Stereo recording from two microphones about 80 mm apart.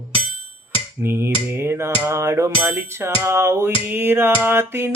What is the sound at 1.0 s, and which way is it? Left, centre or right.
Music, right.